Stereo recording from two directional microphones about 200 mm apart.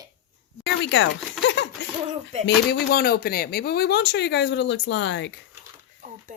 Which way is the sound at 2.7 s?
50° left (ahead or behind).